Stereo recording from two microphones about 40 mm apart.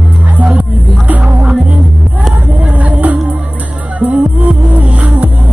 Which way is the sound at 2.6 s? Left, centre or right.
Right.